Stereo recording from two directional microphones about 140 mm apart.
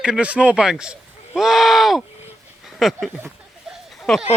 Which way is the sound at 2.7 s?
Centre (ahead or behind).